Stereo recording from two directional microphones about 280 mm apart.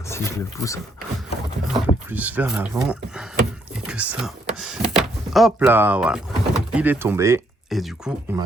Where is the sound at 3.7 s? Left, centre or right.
Centre.